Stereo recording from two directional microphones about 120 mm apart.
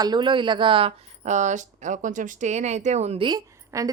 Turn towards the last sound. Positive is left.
turn(degrees=-30)  # may be behind; listen again after turning